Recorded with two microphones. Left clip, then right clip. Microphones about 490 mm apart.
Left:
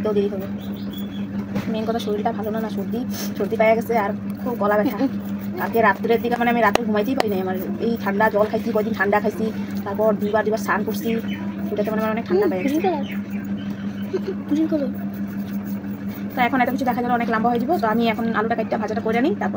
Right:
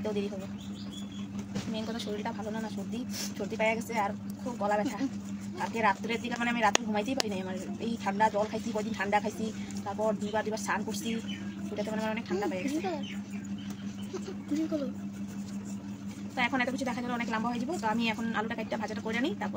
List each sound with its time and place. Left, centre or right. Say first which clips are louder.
3.5 s a woman's voice: left 12 dB; right
10.3 s a woman's voice: left 11 dB; right
16.3 s a woman's voice: left 10 dB; right